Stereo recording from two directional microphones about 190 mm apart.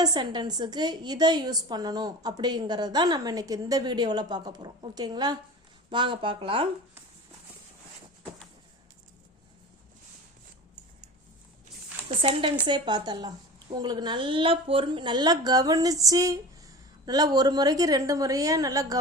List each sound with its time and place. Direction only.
0.0 s a woman's voice: 20° right (ahead or behind)
12.2 s a woman's voice: 30° right (ahead or behind)